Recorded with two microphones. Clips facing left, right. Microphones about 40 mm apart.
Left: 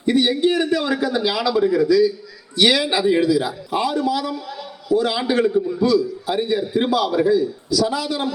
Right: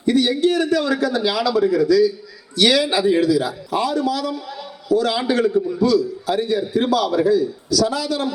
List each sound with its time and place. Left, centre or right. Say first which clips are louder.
0.0 s a man's voice: even; left
4.4 s a sound: even; centre
4.9 s a man's voice: even; centre
5.5 s a man's voice: even; centre
5.8 s a man's voice: right 1 dB; centre